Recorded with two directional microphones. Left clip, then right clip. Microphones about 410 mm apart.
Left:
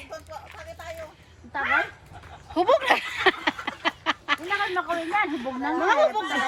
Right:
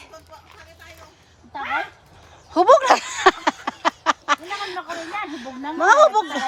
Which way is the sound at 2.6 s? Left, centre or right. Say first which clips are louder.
Right 7 dB; centre.